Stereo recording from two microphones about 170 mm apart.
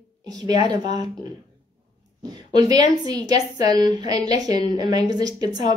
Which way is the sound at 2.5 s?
25° right (ahead or behind).